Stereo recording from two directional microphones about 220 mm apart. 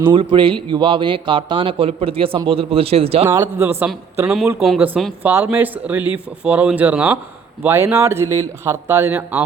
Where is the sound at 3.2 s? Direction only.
10° right (ahead or behind).